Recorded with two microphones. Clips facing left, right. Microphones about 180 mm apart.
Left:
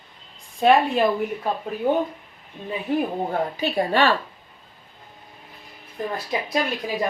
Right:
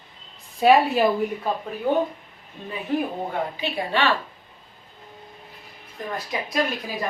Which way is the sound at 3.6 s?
45° left (ahead or behind).